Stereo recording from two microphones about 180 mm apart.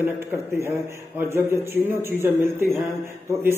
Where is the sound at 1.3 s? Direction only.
10° right (ahead or behind).